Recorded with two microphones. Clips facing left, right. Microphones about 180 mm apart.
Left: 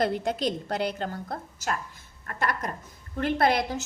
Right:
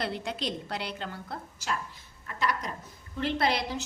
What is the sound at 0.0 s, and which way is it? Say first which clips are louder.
A woman's voice: left 7 dB; 45° left (ahead or behind).